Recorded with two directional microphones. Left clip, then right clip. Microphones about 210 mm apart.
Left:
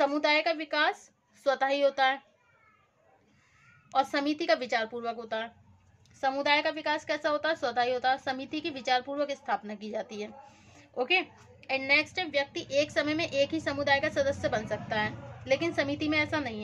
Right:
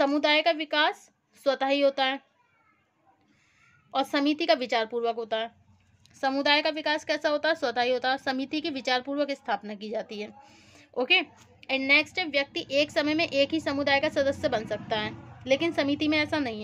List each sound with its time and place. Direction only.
0.0 s a woman's voice: 40° right (ahead or behind)
3.9 s a woman's voice: 40° right (ahead or behind)